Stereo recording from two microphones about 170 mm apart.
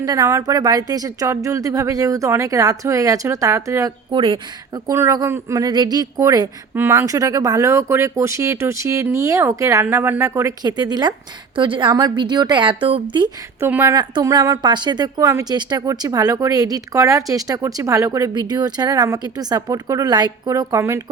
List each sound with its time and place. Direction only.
0.0 s speech: 20° right (ahead or behind)
13.6 s speech: 15° right (ahead or behind)
13.9 s speech: 25° right (ahead or behind)